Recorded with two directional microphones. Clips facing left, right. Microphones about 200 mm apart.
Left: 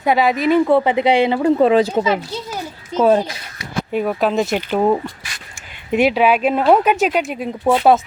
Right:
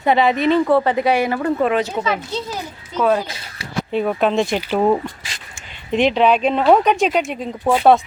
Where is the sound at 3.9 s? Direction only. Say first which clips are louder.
Even; 5° left (ahead or behind).